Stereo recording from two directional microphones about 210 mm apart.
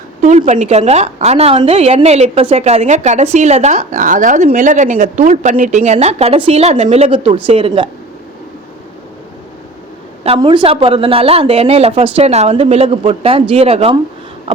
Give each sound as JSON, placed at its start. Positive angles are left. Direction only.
{"t": 0.2, "sound": "a woman's voice", "side_deg": -30}
{"t": 10.2, "sound": "a woman's voice", "side_deg": -25}